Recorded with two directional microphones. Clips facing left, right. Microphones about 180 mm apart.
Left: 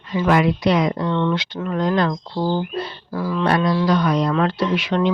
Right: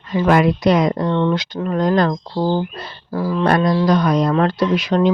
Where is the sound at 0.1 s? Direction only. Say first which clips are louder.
Right 3 dB; 45° right (ahead or behind).